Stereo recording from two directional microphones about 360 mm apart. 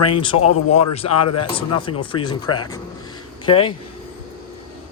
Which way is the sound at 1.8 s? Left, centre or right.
Centre.